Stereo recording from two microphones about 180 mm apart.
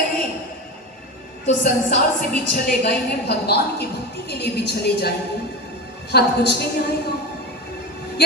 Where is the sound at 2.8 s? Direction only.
65° left (ahead or behind).